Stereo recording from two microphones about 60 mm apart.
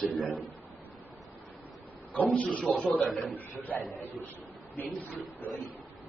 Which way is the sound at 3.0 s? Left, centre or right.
Centre.